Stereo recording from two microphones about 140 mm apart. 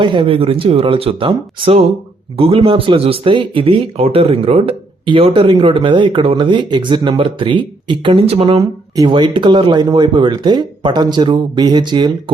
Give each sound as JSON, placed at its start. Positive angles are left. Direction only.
{"t": 0.0, "sound": "speech", "side_deg": -35}